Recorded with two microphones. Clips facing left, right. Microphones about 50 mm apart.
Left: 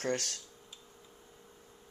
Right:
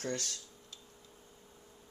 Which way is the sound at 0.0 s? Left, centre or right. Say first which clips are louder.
Left 4 dB; left.